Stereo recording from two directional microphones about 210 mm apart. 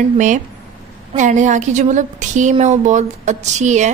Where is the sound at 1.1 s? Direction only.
35° right (ahead or behind).